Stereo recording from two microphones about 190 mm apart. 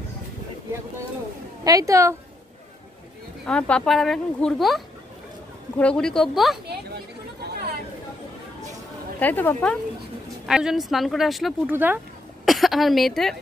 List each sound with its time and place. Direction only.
1.6 s a woman's voice: 20° right (ahead or behind)
3.4 s speech: 5° left (ahead or behind)
7.4 s chatter: 55° right (ahead or behind)
9.2 s speech: 10° left (ahead or behind)
10.4 s a woman's voice: 5° right (ahead or behind)